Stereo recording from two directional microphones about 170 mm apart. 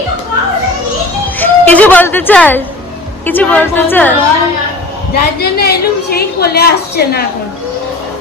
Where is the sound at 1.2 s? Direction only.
10° left (ahead or behind).